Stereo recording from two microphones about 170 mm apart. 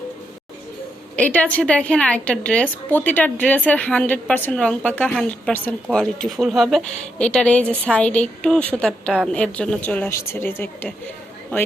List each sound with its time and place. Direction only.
1.1 s a woman's voice: 10° left (ahead or behind)